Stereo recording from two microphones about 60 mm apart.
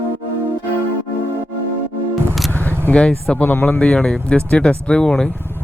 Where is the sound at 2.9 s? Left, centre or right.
Centre.